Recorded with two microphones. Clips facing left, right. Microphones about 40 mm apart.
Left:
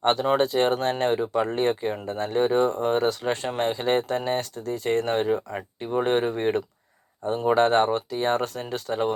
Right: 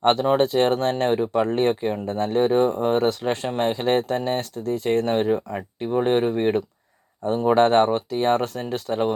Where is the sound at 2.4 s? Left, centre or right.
Centre.